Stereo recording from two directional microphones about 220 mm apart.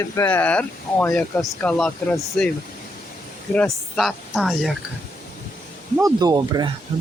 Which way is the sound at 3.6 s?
Centre (ahead or behind).